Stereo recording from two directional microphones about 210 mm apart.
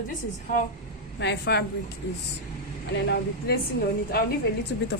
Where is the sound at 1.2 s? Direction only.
55° left (ahead or behind).